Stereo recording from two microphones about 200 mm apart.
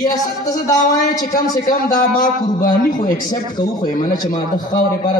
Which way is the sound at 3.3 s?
20° left (ahead or behind).